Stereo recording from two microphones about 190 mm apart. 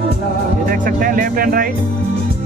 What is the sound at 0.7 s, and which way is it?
Speech, 45° right (ahead or behind).